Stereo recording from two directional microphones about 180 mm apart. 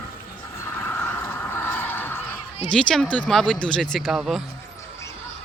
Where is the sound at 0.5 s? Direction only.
15° left (ahead or behind).